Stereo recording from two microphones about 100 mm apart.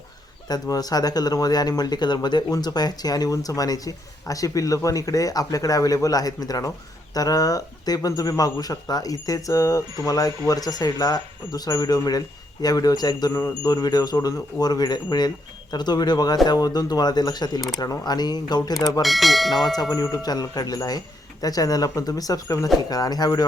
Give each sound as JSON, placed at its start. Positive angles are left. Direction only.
{"t": 0.4, "sound": "speech", "side_deg": 40}
{"t": 19.0, "sound": "speech", "side_deg": 0}
{"t": 19.9, "sound": "speech", "side_deg": 40}